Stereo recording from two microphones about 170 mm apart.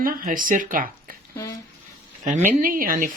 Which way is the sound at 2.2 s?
45° right (ahead or behind).